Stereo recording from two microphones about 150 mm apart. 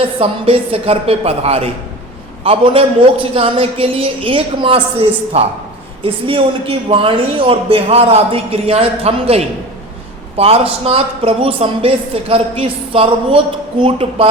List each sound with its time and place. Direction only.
0.0 s a woman's voice: 40° right (ahead or behind)